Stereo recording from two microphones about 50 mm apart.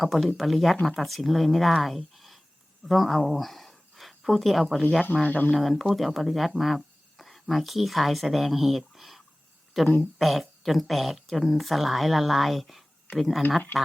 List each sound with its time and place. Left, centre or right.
0.0 s speech: centre
5.2 s speech: left
5.5 s speech: centre